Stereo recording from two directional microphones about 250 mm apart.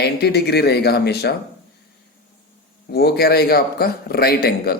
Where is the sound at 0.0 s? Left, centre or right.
Left.